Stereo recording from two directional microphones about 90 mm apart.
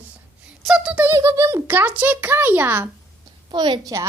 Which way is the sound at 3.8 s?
35° right (ahead or behind).